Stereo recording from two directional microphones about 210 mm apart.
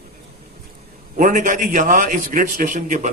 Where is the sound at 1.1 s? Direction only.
40° right (ahead or behind).